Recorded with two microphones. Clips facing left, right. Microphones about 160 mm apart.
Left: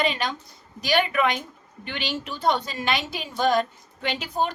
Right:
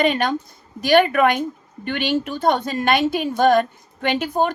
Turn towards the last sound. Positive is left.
turn(degrees=-50)  # may be behind; listen again after turning